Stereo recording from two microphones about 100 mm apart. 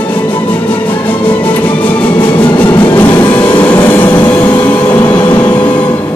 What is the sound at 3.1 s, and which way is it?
Vehicle, 50° left (ahead or behind).